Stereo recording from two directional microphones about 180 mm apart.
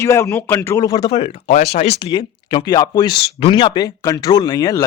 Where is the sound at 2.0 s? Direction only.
25° left (ahead or behind).